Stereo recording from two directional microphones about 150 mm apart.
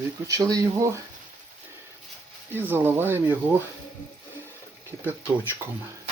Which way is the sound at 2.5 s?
15° right (ahead or behind).